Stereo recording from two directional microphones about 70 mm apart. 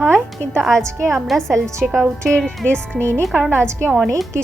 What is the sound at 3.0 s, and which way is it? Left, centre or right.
Speech, right.